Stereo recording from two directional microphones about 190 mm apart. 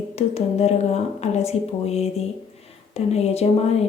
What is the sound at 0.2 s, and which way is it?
A woman's voice, 35° left (ahead or behind).